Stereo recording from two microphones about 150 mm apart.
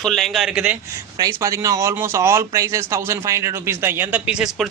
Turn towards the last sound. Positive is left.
turn(degrees=-5)  # may be behind; listen again after turning